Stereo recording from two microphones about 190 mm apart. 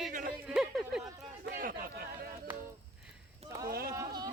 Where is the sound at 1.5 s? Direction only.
50° right (ahead or behind).